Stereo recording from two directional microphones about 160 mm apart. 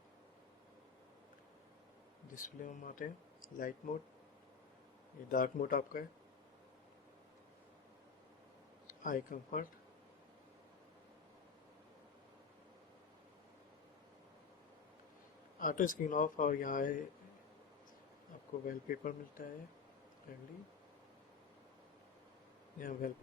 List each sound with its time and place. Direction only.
2.3 s speech: 55° left (ahead or behind)
5.3 s speech: 60° left (ahead or behind)
8.9 s speech: 60° left (ahead or behind)
15.6 s speech: 55° left (ahead or behind)
18.6 s speech: 60° left (ahead or behind)
22.8 s speech: 55° left (ahead or behind)